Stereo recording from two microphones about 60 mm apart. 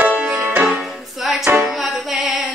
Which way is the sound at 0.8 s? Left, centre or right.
Centre.